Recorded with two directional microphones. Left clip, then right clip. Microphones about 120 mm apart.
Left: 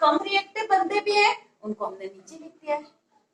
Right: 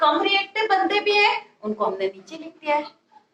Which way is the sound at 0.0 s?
35° right (ahead or behind).